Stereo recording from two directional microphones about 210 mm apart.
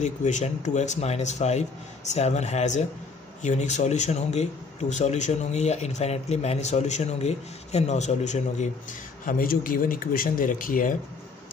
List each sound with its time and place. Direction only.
0.0 s speech: 35° left (ahead or behind)